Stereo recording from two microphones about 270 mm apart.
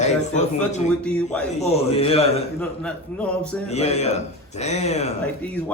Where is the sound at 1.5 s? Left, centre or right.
Left.